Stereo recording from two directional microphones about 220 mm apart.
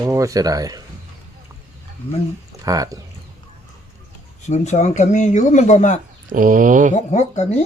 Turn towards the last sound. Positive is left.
turn(degrees=30)  # may be behind; listen again after turning